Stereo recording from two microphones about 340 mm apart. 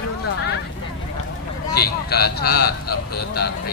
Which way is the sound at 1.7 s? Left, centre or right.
Left.